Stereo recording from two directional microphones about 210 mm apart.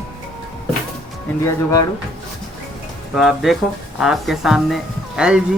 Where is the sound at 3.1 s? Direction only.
Centre (ahead or behind).